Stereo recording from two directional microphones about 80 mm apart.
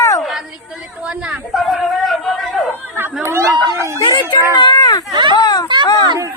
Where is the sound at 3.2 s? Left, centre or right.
Right.